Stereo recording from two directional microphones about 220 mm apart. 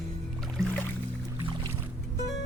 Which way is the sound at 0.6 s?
15° right (ahead or behind).